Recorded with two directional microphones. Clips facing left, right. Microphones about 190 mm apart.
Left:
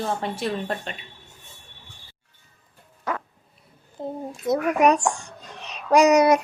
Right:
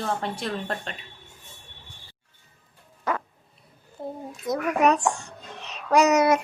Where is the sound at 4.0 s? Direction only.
20° left (ahead or behind).